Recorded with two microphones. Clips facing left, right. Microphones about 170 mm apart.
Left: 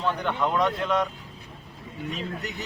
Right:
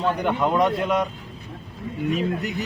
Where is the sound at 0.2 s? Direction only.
15° right (ahead or behind).